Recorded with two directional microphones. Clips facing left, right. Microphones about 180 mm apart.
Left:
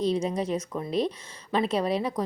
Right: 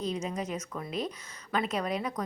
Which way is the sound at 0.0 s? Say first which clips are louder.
Left 7 dB; 30° left (ahead or behind).